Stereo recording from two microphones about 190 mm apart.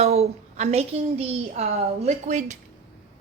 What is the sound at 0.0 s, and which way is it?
A woman's voice, 35° right (ahead or behind).